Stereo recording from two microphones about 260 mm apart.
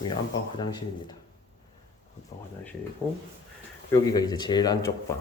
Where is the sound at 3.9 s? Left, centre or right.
Centre.